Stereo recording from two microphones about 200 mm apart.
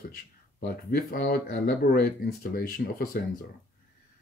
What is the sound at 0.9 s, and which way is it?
Speech, 45° left (ahead or behind).